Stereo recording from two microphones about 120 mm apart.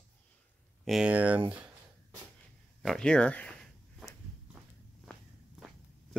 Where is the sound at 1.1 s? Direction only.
10° right (ahead or behind).